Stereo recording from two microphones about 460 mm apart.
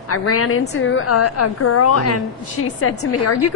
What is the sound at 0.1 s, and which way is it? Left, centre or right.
A woman's voice, left.